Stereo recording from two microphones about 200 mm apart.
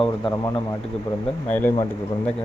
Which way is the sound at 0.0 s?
20° left (ahead or behind).